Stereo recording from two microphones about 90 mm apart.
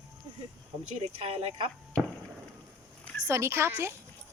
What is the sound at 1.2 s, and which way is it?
Speech, 90° right.